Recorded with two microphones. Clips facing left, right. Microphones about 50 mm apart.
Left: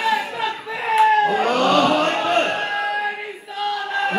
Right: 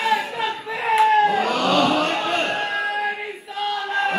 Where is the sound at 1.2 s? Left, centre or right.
Left.